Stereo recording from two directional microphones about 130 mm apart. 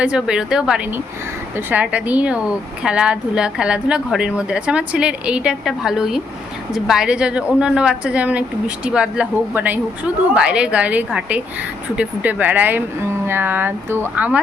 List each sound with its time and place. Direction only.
0.0 s a woman's voice: 5° right (ahead or behind)